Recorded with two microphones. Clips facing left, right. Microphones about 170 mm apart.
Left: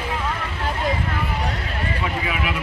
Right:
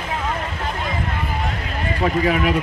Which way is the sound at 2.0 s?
45° right (ahead or behind).